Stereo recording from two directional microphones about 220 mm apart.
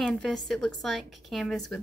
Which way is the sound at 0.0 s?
Centre (ahead or behind).